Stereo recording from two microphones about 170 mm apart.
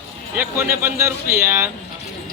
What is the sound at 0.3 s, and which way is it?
Speech, 10° right (ahead or behind).